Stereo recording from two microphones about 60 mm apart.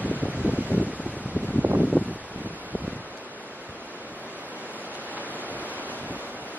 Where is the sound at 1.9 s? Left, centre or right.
Left.